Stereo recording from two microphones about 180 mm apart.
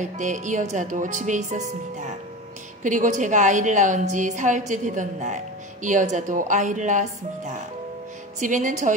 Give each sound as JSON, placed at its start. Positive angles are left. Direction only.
{"t": 0.0, "sound": "a woman's voice", "side_deg": -45}